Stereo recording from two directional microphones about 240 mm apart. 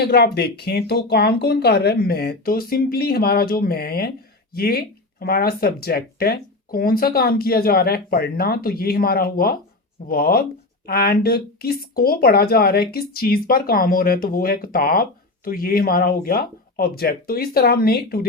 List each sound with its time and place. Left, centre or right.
0.0 s speech: left